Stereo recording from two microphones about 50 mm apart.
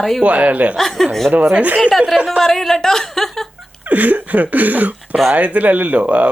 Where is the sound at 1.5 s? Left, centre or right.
Right.